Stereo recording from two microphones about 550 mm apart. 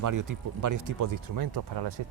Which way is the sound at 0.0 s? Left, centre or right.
Right.